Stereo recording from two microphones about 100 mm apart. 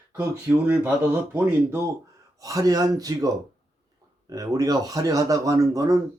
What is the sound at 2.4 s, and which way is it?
Speech, 35° right (ahead or behind).